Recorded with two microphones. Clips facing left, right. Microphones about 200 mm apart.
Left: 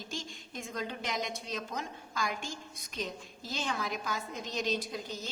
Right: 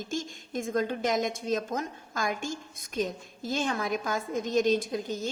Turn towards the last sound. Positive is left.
turn(degrees=-50)  # may be behind; listen again after turning